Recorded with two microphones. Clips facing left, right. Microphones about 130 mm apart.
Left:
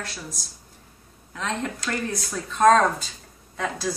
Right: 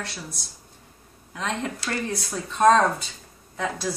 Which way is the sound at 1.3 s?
15° right (ahead or behind).